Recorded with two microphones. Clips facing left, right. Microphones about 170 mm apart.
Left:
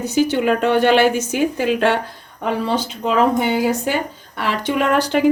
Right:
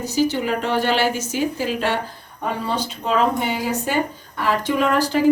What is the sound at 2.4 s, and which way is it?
Speech, 90° left.